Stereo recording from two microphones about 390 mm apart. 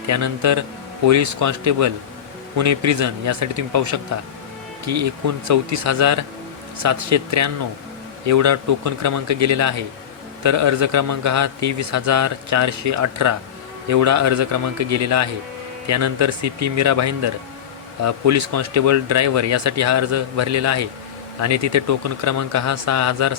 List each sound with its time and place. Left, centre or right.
0.1 s a man's voice: right